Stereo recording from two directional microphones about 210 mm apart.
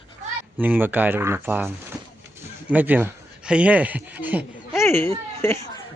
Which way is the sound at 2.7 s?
10° right (ahead or behind).